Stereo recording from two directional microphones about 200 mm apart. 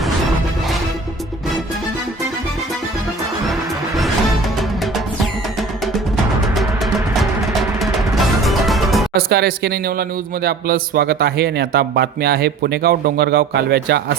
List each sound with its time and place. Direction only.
7.8 s music: centre (ahead or behind)
9.1 s speech: 55° right (ahead or behind)